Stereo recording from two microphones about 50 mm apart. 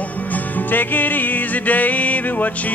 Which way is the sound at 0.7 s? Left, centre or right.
Left.